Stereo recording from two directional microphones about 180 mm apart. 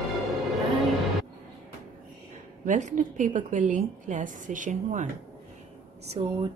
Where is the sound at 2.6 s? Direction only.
45° right (ahead or behind).